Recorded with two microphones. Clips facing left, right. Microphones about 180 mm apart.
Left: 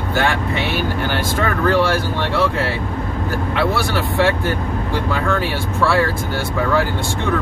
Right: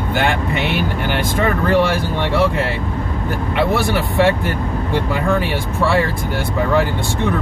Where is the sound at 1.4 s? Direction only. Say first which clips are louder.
Right 1 dB; 15° right (ahead or behind).